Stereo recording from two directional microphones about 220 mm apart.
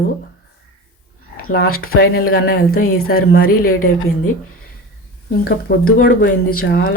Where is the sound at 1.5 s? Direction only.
45° left (ahead or behind).